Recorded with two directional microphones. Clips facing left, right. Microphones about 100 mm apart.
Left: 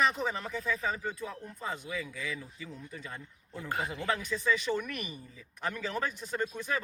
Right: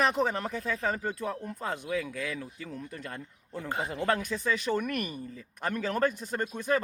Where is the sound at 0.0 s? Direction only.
60° right (ahead or behind).